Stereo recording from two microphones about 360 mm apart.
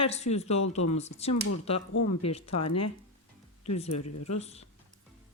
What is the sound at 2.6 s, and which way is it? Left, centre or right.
Speech, left.